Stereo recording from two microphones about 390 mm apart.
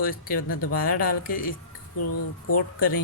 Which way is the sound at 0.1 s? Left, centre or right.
Left.